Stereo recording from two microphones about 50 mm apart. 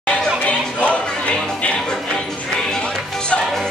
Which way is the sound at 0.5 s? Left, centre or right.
Left.